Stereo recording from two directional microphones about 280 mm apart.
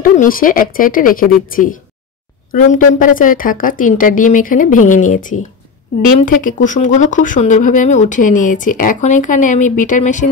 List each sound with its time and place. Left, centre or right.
0.0 s speech: left